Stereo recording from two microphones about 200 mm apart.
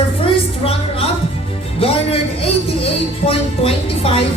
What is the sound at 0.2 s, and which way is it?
Music, 30° left (ahead or behind).